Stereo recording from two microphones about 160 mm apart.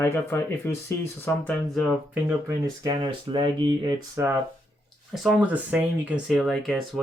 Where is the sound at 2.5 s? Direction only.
25° right (ahead or behind).